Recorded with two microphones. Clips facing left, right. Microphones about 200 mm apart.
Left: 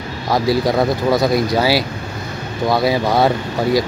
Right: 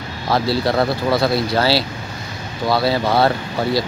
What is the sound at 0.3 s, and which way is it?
Speech, 15° left (ahead or behind).